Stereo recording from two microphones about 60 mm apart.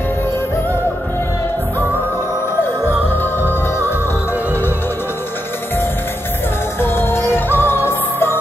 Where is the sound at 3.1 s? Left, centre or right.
Left.